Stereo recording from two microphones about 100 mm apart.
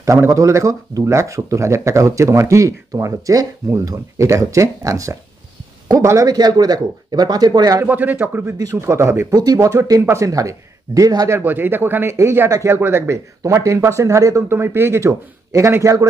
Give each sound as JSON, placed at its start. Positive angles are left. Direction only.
{"t": 0.0, "sound": "speech", "side_deg": -30}
{"t": 7.8, "sound": "speech", "side_deg": -15}
{"t": 9.3, "sound": "speech", "side_deg": -40}